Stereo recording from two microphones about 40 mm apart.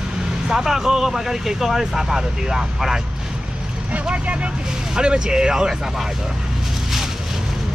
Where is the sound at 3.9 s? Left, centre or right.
Right.